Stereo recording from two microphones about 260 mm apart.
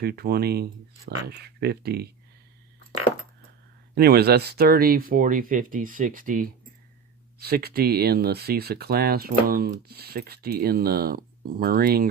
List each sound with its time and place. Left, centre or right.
0.0 s speech: right
3.9 s speech: right